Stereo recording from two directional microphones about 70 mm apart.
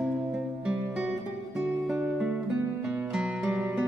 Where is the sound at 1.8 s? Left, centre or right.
Centre.